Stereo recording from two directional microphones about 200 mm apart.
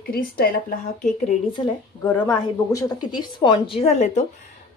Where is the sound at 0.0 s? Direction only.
50° left (ahead or behind).